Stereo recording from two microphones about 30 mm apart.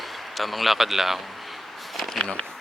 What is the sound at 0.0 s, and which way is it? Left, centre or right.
Speech, centre.